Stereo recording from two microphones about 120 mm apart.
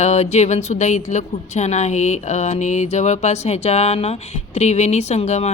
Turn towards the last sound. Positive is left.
turn(degrees=70)  # may be behind; listen again after turning